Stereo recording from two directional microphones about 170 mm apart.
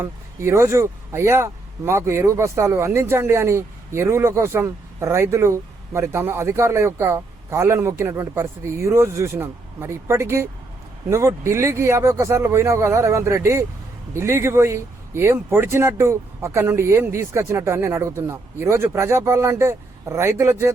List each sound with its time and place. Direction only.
0.0 s speech: 15° right (ahead or behind)